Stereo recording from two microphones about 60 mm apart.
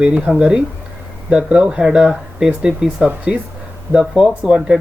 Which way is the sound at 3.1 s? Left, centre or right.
Right.